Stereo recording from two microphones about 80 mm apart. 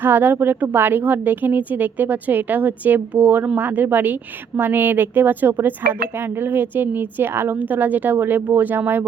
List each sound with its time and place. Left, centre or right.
0.0 s speech: right